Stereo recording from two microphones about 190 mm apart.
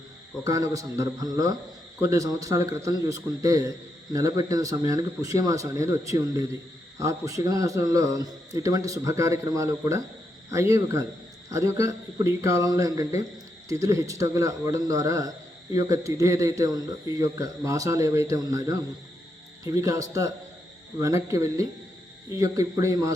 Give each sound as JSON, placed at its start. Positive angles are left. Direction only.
{"t": 0.4, "sound": "speech", "side_deg": -20}